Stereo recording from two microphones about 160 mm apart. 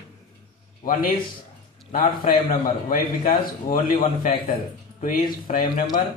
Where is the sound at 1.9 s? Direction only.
60° left (ahead or behind).